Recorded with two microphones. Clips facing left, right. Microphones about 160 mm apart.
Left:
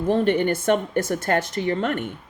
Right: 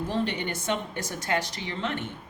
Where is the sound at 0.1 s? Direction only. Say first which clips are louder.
Left 13 dB; 50° left (ahead or behind).